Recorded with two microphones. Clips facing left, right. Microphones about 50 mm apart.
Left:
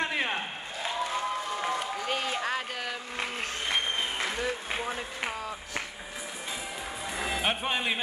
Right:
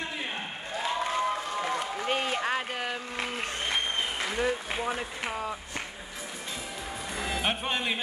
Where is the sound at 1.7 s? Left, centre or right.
Centre.